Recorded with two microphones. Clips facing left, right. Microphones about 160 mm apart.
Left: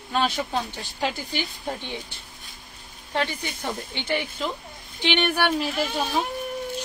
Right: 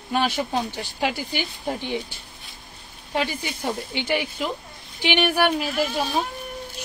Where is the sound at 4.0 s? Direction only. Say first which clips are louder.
Right 1 dB; 10° right (ahead or behind).